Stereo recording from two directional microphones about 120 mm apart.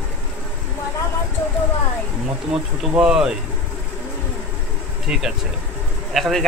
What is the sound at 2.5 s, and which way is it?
Speech, 5° right (ahead or behind).